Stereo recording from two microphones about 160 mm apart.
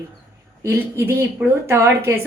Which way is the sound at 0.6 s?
15° right (ahead or behind).